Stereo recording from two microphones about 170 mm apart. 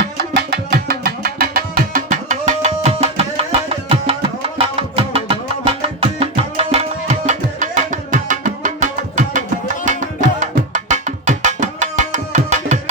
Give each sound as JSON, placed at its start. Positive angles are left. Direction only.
{"t": 0.3, "sound": "music", "side_deg": -70}
{"t": 9.8, "sound": "tabla", "side_deg": -50}